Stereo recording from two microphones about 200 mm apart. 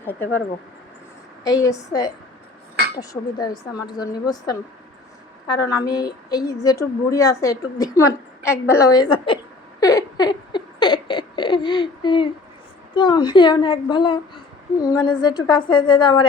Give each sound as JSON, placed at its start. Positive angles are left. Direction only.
{"t": 0.0, "sound": "a woman's voice", "side_deg": 10}
{"t": 1.5, "sound": "a woman's voice", "side_deg": 15}
{"t": 9.8, "sound": "a sound", "side_deg": 20}
{"t": 12.9, "sound": "a woman's voice", "side_deg": 20}